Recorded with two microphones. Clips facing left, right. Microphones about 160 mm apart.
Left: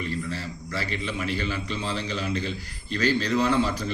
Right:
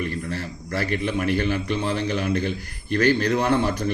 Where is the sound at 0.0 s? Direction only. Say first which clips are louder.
Right 3 dB; 60° right (ahead or behind).